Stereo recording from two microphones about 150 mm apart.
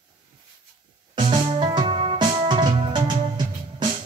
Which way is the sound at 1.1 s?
30° right (ahead or behind).